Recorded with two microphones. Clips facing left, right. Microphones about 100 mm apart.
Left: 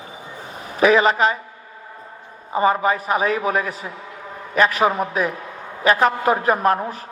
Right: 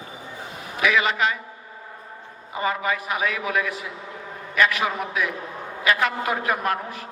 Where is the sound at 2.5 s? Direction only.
35° left (ahead or behind).